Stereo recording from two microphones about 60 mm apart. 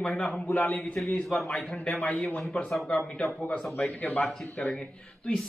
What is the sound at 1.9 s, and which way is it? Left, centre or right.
Speech, left.